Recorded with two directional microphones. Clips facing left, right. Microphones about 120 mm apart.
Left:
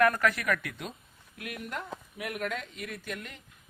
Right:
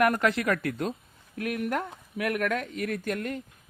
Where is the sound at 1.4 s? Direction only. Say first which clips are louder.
Right 9 dB; 55° right (ahead or behind).